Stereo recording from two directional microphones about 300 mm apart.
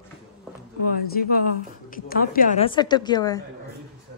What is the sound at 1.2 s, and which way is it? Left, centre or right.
A woman's voice, left.